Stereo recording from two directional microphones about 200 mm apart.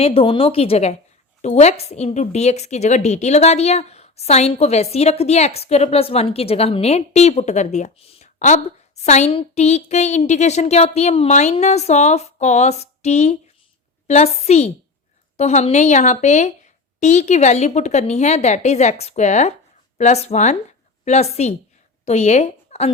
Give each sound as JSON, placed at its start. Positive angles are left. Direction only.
{"t": 0.0, "sound": "speech", "side_deg": 30}